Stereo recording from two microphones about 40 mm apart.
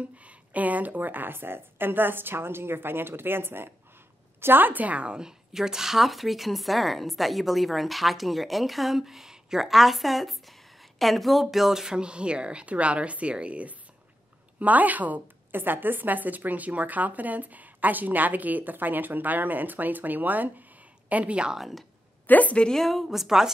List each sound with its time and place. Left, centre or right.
0.2 s a woman's voice: right
4.9 s speech: right
5.2 s speech: centre
11.8 s a woman's voice: right
21.1 s a woman's voice: right
21.5 s speech: centre
22.2 s a woman's voice: left
22.8 s speech: centre